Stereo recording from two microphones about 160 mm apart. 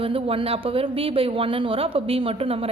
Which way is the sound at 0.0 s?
35° right (ahead or behind).